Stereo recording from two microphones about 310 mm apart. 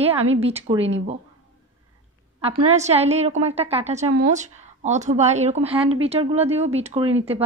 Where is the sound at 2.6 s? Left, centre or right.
Right.